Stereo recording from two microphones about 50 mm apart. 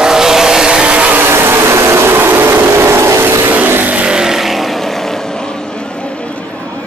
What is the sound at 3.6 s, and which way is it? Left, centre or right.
Vehicle, right.